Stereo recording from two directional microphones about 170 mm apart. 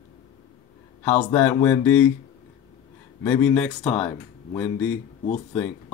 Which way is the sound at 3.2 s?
10° left (ahead or behind).